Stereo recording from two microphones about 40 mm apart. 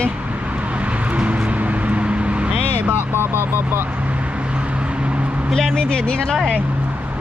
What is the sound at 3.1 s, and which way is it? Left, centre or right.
Speech, right.